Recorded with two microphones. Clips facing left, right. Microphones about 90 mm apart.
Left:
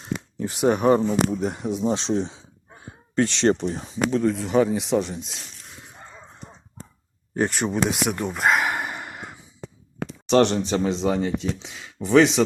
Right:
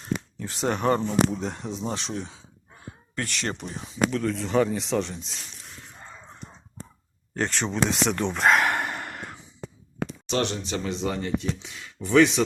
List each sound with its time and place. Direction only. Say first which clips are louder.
0.0 s speech: left 2 dB; 15° left (ahead or behind); by 4.2 s 35° left (ahead or behind)
4.2 s speech: left 5 dB; 15° left (ahead or behind)
7.3 s a sound: left 3 dB; 15° left (ahead or behind)
10.2 s speech: left 9 dB; 50° left (ahead or behind)
10.8 s speech: left 5 dB; 25° left (ahead or behind)